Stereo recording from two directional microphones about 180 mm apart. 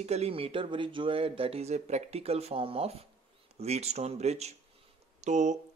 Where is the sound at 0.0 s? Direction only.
35° right (ahead or behind).